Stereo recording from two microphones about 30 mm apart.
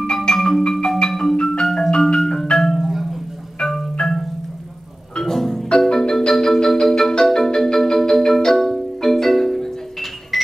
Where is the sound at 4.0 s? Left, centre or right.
Left.